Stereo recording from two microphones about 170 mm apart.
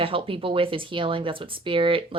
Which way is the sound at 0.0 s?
30° right (ahead or behind).